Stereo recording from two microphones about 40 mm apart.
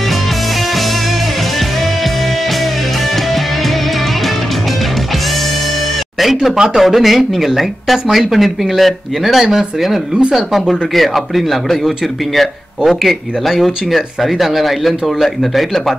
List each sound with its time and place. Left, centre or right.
6.2 s speech: centre